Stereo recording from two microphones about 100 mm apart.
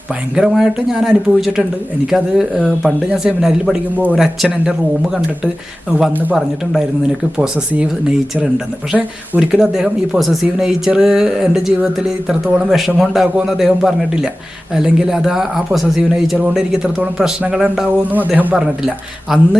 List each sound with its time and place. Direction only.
0.3 s speech: 5° right (ahead or behind)
5.9 s speech: 15° right (ahead or behind)
7.3 s speech: 10° right (ahead or behind)
18.1 s speech: 15° right (ahead or behind)